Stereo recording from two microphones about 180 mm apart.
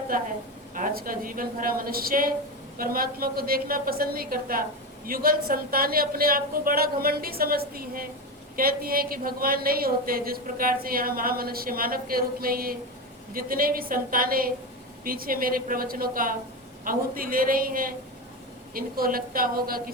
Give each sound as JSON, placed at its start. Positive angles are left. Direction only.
{"t": 0.7, "sound": "a woman's voice", "side_deg": -50}